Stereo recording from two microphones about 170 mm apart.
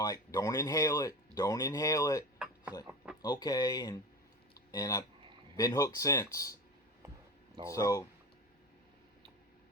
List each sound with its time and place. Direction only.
0.0 s speech: 20° left (ahead or behind)
4.5 s a sound: 20° left (ahead or behind)
5.5 s speech: 20° left (ahead or behind)
7.7 s speech: 20° left (ahead or behind)